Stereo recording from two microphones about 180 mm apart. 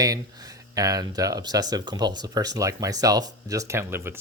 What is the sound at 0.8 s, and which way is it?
Speech, 20° right (ahead or behind).